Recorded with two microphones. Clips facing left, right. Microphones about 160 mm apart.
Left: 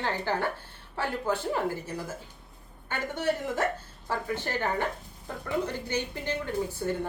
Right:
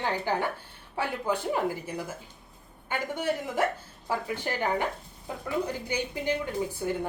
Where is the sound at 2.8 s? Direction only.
10° right (ahead or behind).